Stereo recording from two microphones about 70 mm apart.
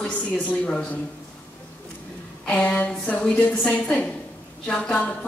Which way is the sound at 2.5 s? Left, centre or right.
Centre.